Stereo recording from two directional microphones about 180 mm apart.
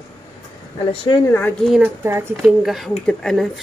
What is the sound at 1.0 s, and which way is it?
Speech, 20° left (ahead or behind).